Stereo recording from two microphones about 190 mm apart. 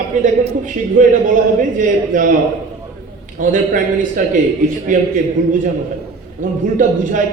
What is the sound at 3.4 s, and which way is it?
A man's voice, 45° right (ahead or behind).